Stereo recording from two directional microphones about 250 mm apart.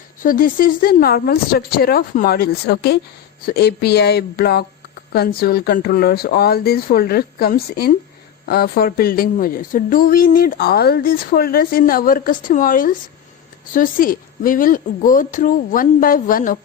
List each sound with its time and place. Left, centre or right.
0.2 s a woman's voice: left